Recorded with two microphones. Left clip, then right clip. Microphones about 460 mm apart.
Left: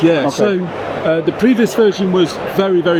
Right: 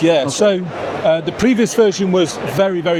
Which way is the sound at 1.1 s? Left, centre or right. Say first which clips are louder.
Left 2 dB; right.